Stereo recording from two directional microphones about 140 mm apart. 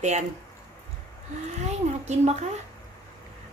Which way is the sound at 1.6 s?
55° right (ahead or behind).